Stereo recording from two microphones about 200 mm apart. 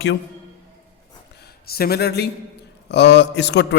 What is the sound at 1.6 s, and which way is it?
A man's voice, 50° left (ahead or behind).